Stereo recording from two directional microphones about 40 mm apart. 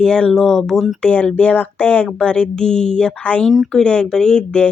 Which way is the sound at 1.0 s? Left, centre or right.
Left.